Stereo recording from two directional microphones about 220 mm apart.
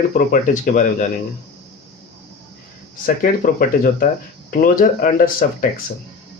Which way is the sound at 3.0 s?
40° left (ahead or behind).